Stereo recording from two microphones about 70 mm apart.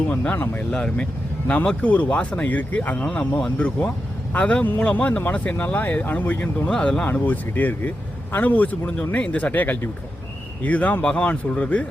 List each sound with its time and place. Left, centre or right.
0.1 s speech: left
0.7 s speech: centre
3.1 s speech: centre
6.7 s speech: centre
7.1 s speech: left
9.5 s speech: left